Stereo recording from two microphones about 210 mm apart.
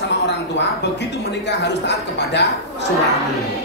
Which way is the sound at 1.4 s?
55° left (ahead or behind).